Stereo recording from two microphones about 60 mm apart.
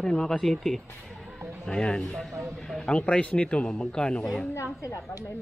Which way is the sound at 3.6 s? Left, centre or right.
Centre.